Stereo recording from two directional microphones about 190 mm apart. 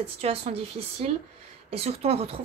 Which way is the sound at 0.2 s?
30° right (ahead or behind).